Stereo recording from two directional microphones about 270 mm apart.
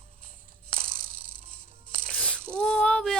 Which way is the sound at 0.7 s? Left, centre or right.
Right.